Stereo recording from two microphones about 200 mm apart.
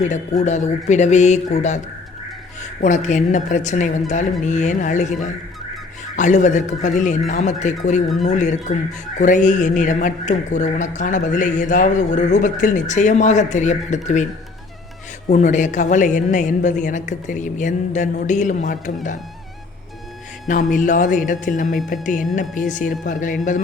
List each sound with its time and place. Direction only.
0.0 s a man's voice: 35° left (ahead or behind)
2.8 s a man's voice: 35° left (ahead or behind)
6.1 s a man's voice: 35° left (ahead or behind)
15.3 s a man's voice: 35° left (ahead or behind)
20.5 s a man's voice: 40° left (ahead or behind)